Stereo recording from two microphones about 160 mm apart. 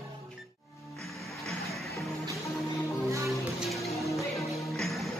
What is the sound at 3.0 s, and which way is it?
Music, 20° right (ahead or behind).